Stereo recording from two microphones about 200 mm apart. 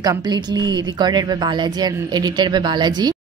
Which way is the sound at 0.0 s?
20° right (ahead or behind).